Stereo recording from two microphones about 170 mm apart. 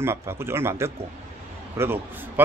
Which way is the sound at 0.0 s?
15° right (ahead or behind).